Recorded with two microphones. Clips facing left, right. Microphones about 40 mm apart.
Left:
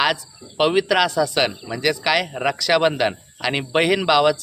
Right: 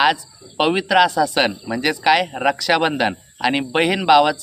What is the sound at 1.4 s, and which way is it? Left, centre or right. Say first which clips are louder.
Speech: right 2 dB; centre.